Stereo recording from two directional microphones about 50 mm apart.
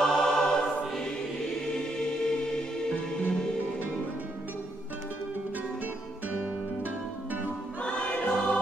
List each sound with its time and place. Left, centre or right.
0.0 s choir: centre
2.9 s music: left
6.2 s music: right
7.8 s choir: centre